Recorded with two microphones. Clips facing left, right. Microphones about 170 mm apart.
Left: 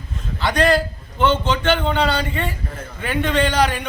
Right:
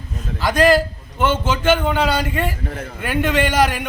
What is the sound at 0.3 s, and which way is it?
A man's voice, 5° right (ahead or behind).